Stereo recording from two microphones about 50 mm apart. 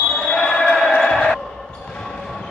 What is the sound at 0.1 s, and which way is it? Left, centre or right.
Basketball bounce, centre.